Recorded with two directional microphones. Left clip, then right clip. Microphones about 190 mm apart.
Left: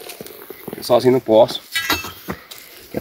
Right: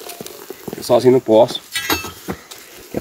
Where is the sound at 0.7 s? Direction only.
15° right (ahead or behind).